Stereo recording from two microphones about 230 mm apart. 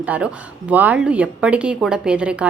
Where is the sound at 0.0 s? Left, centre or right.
Centre.